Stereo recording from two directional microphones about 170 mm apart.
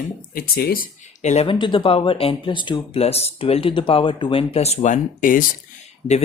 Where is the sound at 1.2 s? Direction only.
40° left (ahead or behind).